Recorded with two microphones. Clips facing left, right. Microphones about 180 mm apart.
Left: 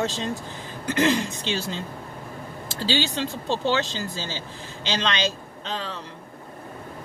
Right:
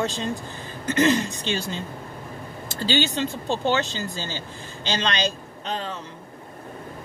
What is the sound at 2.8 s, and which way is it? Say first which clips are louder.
Speech: right 2 dB; 90° left.